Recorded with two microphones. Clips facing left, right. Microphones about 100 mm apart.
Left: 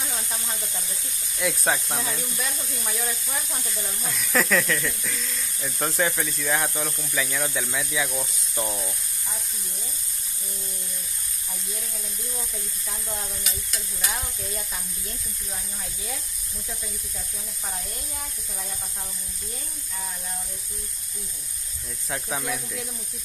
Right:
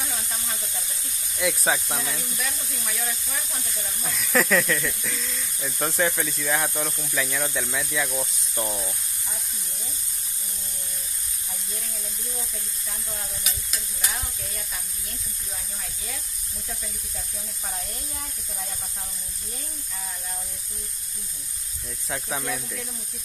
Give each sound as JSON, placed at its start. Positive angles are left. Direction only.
{"t": 1.4, "sound": "speech", "side_deg": 0}
{"t": 2.4, "sound": "speech", "side_deg": 25}
{"t": 4.0, "sound": "speech", "side_deg": 0}
{"t": 13.4, "sound": "speech", "side_deg": 0}
{"t": 22.1, "sound": "speech", "side_deg": 0}